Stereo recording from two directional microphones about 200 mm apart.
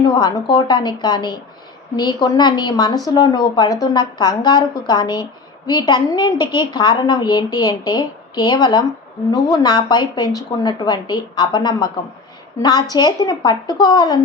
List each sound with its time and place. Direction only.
0.2 s a woman's voice: 20° left (ahead or behind)